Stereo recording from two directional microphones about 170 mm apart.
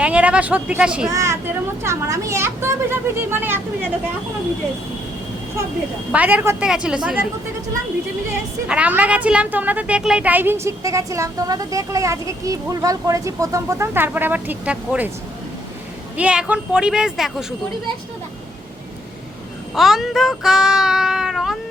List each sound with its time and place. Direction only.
0.0 s a woman's voice: 5° right (ahead or behind)
1.1 s a woman's voice: 20° right (ahead or behind)
6.1 s a woman's voice: 10° right (ahead or behind)
8.6 s a woman's voice: 5° right (ahead or behind)
16.1 s speech: 5° right (ahead or behind)
19.7 s speech: centre (ahead or behind)